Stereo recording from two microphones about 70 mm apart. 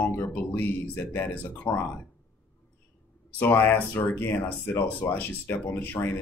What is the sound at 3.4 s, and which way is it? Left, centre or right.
Speech, left.